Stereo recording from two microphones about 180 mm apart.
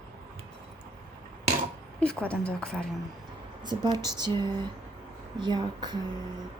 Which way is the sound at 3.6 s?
25° right (ahead or behind).